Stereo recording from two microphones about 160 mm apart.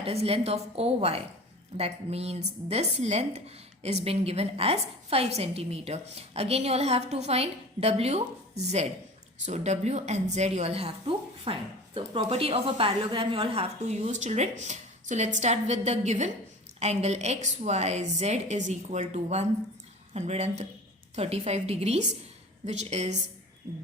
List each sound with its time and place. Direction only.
0.0 s a woman's voice: 40° right (ahead or behind)